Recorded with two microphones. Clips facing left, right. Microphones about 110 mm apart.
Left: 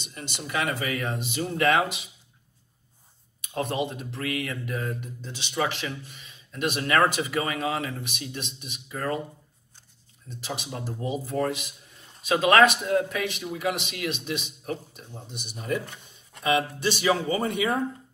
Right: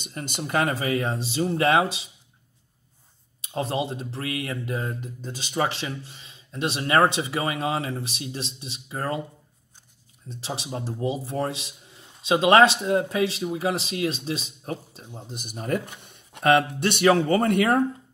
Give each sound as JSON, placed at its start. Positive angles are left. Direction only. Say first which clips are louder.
{"t": 0.0, "sound": "speech", "louder": "right 5 dB", "side_deg": -50}
{"t": 3.3, "sound": "speech", "louder": "right 1 dB", "side_deg": -30}
{"t": 10.2, "sound": "speech", "louder": "right 2 dB", "side_deg": -30}
{"t": 15.2, "sound": "speech", "louder": "right 1 dB", "side_deg": -45}
{"t": 16.0, "sound": "speech", "louder": "right 8 dB", "side_deg": -60}